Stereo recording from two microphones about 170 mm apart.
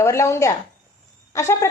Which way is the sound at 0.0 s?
15° left (ahead or behind).